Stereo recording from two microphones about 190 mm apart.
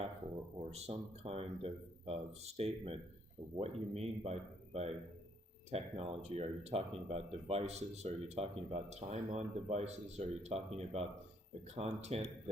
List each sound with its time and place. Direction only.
0.7 s speech: 30° right (ahead or behind)